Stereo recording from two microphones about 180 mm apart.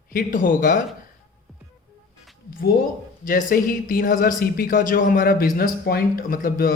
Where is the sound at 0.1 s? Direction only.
50° left (ahead or behind).